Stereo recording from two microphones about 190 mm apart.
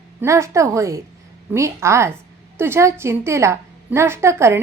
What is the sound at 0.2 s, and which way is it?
A woman's voice, 15° right (ahead or behind).